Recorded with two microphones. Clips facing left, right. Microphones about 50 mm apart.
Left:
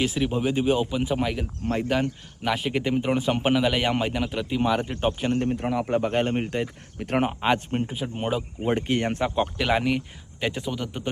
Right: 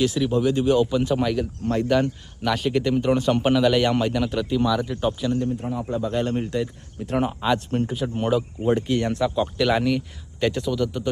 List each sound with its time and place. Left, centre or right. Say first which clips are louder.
0.0 s speech: right 4 dB; left
4.6 s speech: left 2 dB; left
5.4 s speech: left 1 dB; left
5.9 s speech: even; left
7.8 s speech: right 4 dB; centre; by 9.6 s left
9.6 s speech: right 2 dB; centre
10.7 s speech: right 6 dB; left